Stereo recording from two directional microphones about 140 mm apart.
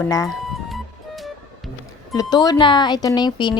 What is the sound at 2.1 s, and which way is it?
Speech, 30° left (ahead or behind).